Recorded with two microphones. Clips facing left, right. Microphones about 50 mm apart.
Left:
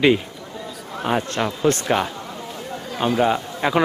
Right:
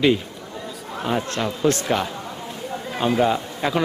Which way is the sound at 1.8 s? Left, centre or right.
Centre.